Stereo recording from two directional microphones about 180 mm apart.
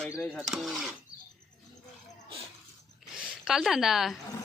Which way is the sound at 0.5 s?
Centre (ahead or behind).